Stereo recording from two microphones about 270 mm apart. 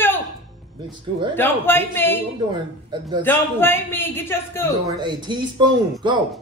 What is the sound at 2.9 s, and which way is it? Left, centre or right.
Speech, centre.